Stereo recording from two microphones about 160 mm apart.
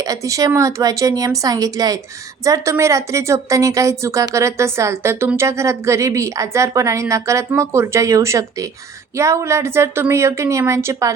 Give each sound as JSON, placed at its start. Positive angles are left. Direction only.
{"t": 0.0, "sound": "a woman's voice", "side_deg": -20}